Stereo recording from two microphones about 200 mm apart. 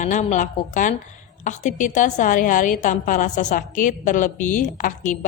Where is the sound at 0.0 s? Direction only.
40° left (ahead or behind).